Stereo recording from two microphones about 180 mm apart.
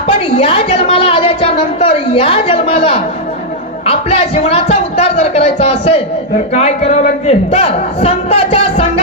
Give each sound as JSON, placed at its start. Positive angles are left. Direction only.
{"t": 0.1, "sound": "a woman's voice", "side_deg": 30}